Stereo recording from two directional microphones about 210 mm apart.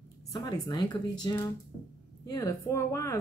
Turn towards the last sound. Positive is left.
turn(degrees=15)  # may be behind; listen again after turning